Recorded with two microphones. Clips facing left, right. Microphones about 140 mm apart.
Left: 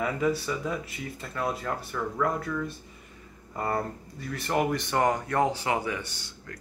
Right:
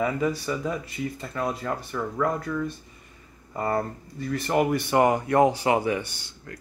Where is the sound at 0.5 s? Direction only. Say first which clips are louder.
Right 2 dB; centre (ahead or behind).